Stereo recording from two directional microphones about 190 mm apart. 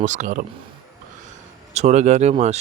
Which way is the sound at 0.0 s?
40° right (ahead or behind).